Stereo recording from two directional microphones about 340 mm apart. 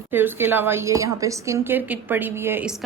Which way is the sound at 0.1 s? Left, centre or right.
Centre.